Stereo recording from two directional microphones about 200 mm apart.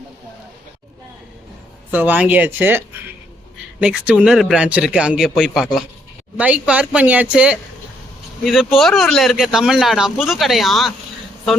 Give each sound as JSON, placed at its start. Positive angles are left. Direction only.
{"t": 1.9, "sound": "speech", "side_deg": -10}